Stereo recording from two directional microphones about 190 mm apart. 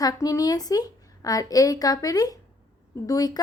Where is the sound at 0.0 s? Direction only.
20° left (ahead or behind).